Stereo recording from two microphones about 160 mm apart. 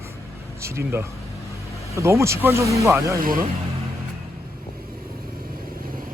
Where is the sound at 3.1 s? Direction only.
60° right (ahead or behind).